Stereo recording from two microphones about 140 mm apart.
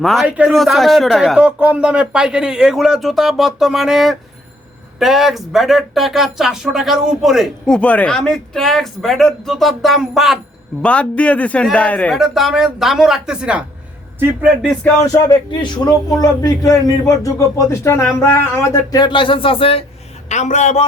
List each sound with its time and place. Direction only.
0.0 s speech: centre (ahead or behind)
0.3 s a man's voice: 10° right (ahead or behind)
0.5 s speech: centre (ahead or behind)
10.8 s a man's voice: 10° left (ahead or behind)
12.1 s a man's voice: centre (ahead or behind)
15.0 s a man's voice: 25° left (ahead or behind)
20.3 s a man's voice: 55° left (ahead or behind)